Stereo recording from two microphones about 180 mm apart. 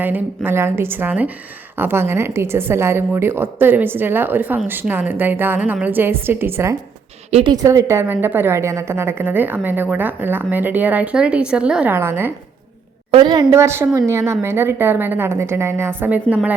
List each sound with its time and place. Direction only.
0.0 s a woman's voice: 10° right (ahead or behind)
7.3 s speech: 35° right (ahead or behind)
7.5 s a woman's voice: 20° right (ahead or behind)
13.1 s a woman's voice: 25° right (ahead or behind); by 16.6 s 10° right (ahead or behind)